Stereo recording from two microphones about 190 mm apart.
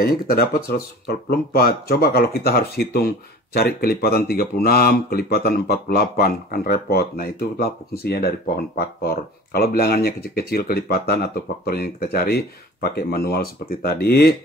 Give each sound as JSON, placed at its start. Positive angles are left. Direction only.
{"t": 0.0, "sound": "speech", "side_deg": 50}